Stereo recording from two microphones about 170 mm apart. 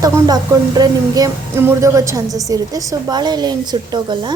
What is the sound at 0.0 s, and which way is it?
Speech, 20° right (ahead or behind).